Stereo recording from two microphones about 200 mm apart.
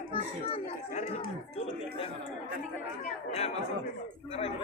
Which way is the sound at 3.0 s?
30° left (ahead or behind).